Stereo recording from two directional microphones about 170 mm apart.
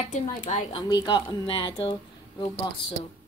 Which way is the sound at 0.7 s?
25° left (ahead or behind).